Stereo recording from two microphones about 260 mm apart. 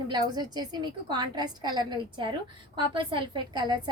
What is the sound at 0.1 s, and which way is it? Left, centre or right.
A woman's voice, centre.